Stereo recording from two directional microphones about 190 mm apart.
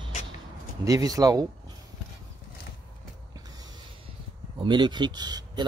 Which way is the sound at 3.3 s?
20° right (ahead or behind).